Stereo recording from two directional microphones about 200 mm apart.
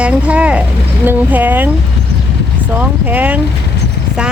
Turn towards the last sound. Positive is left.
turn(degrees=-10)  # may be behind; listen again after turning